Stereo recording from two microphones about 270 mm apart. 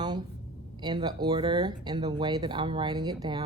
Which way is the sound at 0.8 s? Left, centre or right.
Centre.